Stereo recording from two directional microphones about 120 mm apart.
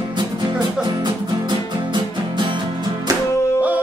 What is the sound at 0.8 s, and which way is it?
Music, 40° right (ahead or behind).